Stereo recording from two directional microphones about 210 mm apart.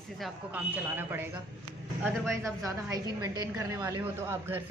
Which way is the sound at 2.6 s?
15° right (ahead or behind).